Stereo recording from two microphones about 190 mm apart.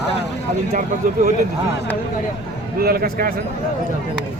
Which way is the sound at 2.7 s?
55° right (ahead or behind).